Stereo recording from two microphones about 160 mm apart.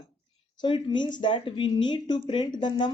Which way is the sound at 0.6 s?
30° left (ahead or behind).